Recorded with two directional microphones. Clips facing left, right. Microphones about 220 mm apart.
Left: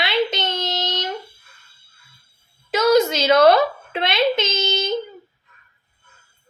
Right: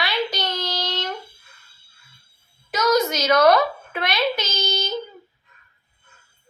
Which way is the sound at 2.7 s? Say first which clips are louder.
Left 4 dB; 25° left (ahead or behind).